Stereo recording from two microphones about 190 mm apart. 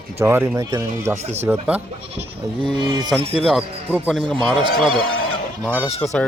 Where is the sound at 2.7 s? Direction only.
25° right (ahead or behind).